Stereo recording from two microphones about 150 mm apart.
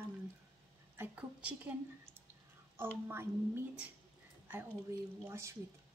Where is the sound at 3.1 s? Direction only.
15° right (ahead or behind).